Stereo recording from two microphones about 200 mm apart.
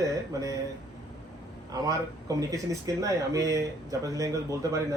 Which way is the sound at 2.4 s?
15° right (ahead or behind).